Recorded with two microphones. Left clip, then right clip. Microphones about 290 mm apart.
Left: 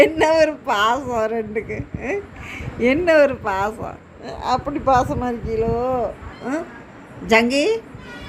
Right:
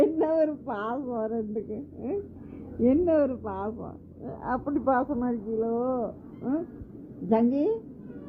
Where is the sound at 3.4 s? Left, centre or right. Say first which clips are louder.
Left 12 dB; left.